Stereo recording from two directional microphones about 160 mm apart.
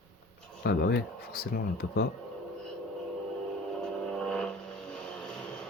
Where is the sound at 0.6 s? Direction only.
90° left.